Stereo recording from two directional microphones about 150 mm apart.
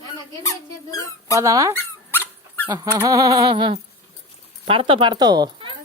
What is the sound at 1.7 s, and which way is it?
Dog, 15° left (ahead or behind).